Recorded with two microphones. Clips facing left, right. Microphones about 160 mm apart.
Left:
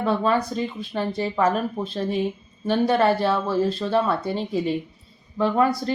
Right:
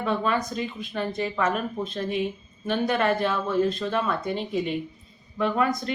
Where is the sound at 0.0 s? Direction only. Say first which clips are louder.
Left 4 dB; 30° left (ahead or behind).